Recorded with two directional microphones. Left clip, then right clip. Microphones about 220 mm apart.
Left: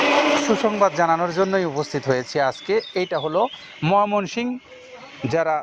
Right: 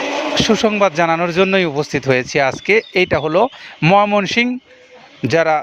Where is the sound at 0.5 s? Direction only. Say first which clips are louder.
Right 4 dB; 80° right.